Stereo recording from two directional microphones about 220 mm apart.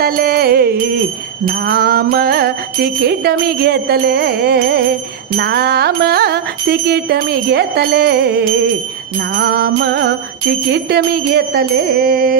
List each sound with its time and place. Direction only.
0.0 s music: 45° right (ahead or behind)